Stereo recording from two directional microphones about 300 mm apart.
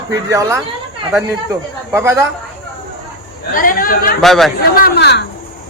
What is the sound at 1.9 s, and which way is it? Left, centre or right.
Speech, centre.